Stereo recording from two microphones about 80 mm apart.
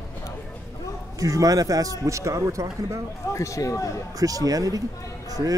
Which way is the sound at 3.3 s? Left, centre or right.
Left.